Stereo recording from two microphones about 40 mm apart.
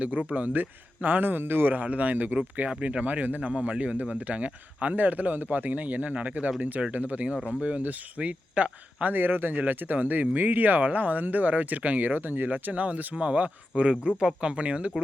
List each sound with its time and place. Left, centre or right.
0.0 s speech: right
8.2 s speech: right
9.1 s speech: right